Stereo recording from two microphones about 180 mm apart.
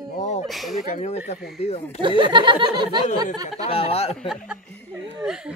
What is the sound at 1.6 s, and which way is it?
Speech, 35° left (ahead or behind).